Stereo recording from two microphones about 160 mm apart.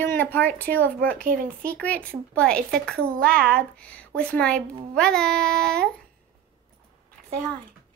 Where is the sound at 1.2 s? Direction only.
65° right (ahead or behind).